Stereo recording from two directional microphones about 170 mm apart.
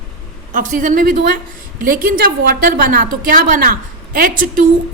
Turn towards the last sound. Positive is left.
turn(degrees=-55)  # may be behind; listen again after turning